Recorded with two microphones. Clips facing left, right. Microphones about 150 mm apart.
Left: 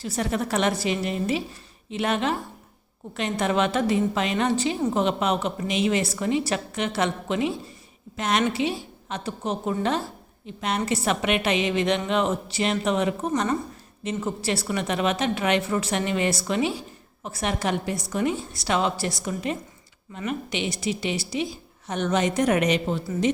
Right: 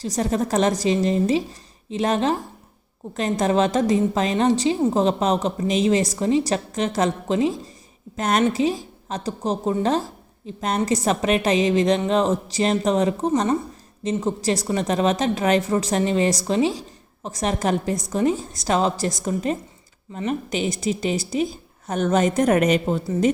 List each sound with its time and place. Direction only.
0.0 s a woman's voice: 35° right (ahead or behind)
14.0 s a woman's voice: 35° right (ahead or behind)